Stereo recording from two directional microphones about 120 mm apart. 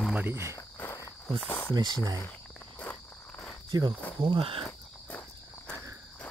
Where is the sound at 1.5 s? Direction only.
15° left (ahead or behind).